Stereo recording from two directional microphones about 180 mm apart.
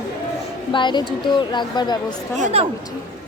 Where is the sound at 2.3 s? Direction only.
40° right (ahead or behind).